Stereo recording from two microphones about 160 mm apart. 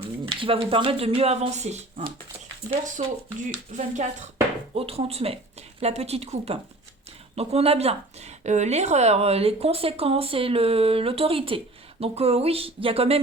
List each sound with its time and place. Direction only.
0.0 s speech: 35° right (ahead or behind)
4.7 s speech: 35° right (ahead or behind)